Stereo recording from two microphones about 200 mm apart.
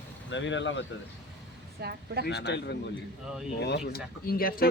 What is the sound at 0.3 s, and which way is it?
Speech, 65° left (ahead or behind).